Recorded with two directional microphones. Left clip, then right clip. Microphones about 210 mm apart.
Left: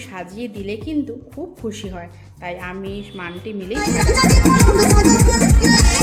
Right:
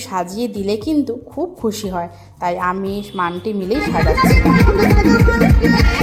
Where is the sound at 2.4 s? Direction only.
15° right (ahead or behind).